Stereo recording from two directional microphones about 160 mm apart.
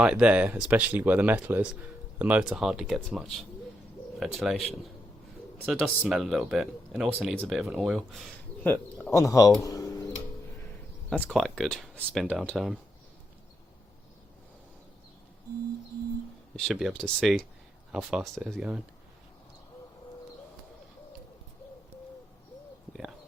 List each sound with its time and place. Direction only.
0.0 s speech: 5° right (ahead or behind)
9.1 s speech: 20° left (ahead or behind)
11.1 s speech: 5° left (ahead or behind)
16.6 s speech: centre (ahead or behind)
22.9 s bird: 5° right (ahead or behind)